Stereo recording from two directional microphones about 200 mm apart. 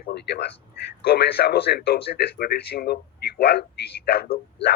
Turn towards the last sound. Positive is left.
turn(degrees=50)  # may be behind; listen again after turning